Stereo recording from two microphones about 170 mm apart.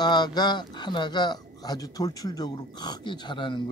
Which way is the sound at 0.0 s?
25° left (ahead or behind).